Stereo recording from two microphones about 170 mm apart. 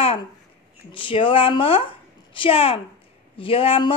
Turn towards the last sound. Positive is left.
turn(degrees=30)  # may be behind; listen again after turning